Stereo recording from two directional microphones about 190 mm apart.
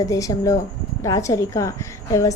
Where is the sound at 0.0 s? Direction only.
15° left (ahead or behind).